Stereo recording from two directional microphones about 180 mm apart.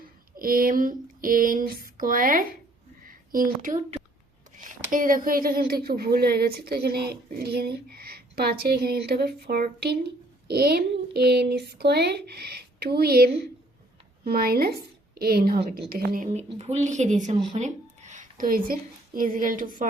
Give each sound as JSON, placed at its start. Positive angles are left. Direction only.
{"t": 0.3, "sound": "a sound", "side_deg": -50}
{"t": 3.1, "sound": "a woman's voice", "side_deg": -50}
{"t": 16.3, "sound": "speech", "side_deg": -35}